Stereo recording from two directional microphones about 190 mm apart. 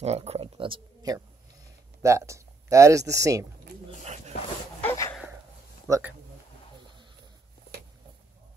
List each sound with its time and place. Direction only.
0.0 s speech: 35° right (ahead or behind); by 3.4 s 15° right (ahead or behind)
4.8 s a sound: 15° left (ahead or behind)
5.9 s speech: 15° right (ahead or behind)